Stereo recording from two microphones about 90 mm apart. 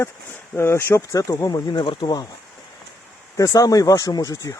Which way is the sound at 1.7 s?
65° left (ahead or behind).